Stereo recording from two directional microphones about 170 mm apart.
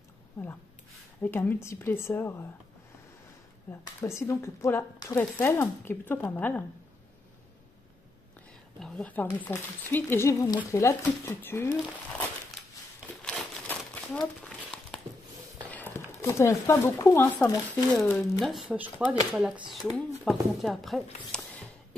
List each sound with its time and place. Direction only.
1.2 s speech: 10° left (ahead or behind)
3.8 s speech: 20° left (ahead or behind)
8.7 s a woman's voice: 5° left (ahead or behind)
13.2 s crumpling: 5° left (ahead or behind)
15.6 s speech: 10° left (ahead or behind)
18.4 s speech: centre (ahead or behind)